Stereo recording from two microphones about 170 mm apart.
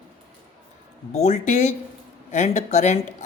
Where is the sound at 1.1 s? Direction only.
40° left (ahead or behind).